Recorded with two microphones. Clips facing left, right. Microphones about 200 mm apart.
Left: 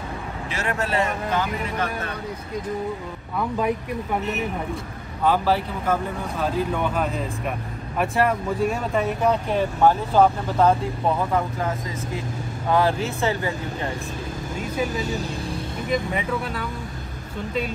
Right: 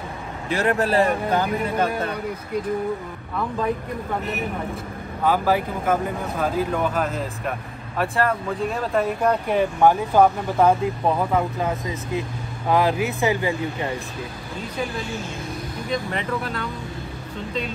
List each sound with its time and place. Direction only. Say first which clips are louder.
0.5 s speech: right 6 dB; 35° right (ahead or behind)
5.2 s speech: even; 10° right (ahead or behind)
14.6 s speech: left 2 dB; 45° left (ahead or behind)
15.9 s speech: left 1 dB; 10° left (ahead or behind)